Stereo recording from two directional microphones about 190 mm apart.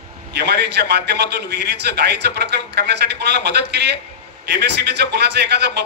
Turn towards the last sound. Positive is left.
turn(degrees=-60)  # may be behind; listen again after turning